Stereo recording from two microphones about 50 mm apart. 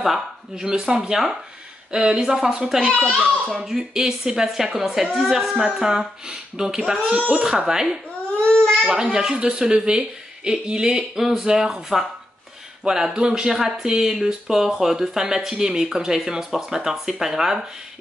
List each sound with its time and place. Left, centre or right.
0.0 s speech: centre
0.7 s speech: centre
2.9 s a child's voice: left
3.5 s speech: centre
8.5 s baby cry: centre
8.8 s speech: centre